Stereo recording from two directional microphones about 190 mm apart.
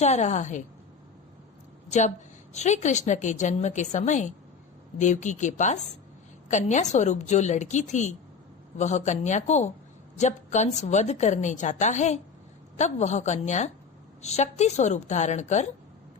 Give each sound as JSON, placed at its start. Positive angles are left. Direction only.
{"t": 0.0, "sound": "a woman's voice", "side_deg": 35}
{"t": 1.9, "sound": "a woman's voice", "side_deg": 40}